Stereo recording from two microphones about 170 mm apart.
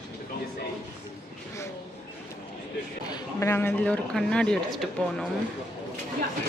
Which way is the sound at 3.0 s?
20° left (ahead or behind).